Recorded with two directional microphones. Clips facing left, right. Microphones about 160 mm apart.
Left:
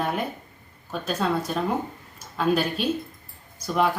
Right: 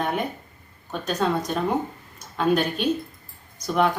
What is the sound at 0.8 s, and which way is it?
Speech, 5° left (ahead or behind).